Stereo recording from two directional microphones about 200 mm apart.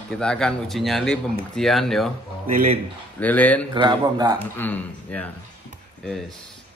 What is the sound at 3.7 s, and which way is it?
Speech, 20° right (ahead or behind).